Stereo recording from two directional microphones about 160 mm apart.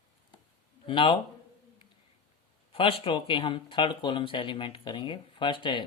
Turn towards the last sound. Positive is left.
turn(degrees=30)  # may be behind; listen again after turning